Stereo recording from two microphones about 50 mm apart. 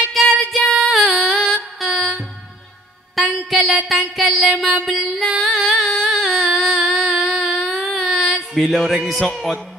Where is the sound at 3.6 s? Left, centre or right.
Centre.